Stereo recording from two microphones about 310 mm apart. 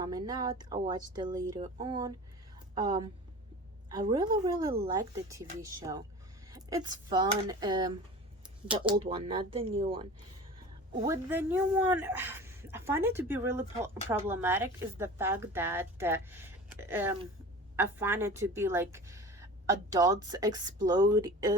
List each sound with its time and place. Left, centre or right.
0.0 s a woman's voice: centre
9.0 s a woman's voice: centre